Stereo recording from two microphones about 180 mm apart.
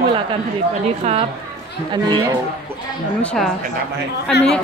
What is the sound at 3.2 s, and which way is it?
Speech, centre (ahead or behind).